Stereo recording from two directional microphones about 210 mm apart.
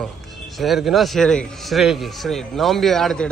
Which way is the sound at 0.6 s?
Centre (ahead or behind).